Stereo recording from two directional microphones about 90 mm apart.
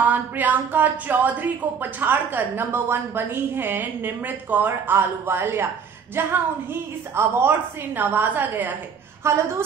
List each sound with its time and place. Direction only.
0.0 s speech: 20° right (ahead or behind)
9.2 s speech: 30° right (ahead or behind)